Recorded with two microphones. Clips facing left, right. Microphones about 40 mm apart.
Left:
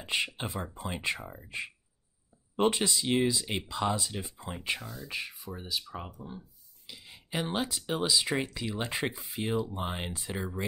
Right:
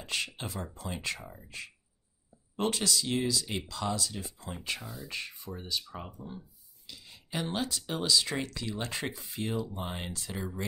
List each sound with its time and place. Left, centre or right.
0.0 s speech: left
4.8 s speech: centre
5.1 s speech: centre